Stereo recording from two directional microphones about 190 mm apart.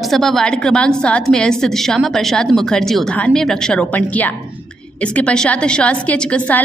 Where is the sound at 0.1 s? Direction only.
Centre (ahead or behind).